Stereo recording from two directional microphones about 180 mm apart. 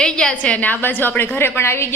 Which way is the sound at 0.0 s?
5° left (ahead or behind).